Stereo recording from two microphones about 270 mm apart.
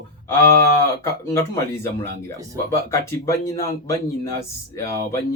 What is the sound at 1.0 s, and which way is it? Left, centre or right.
Speech, centre.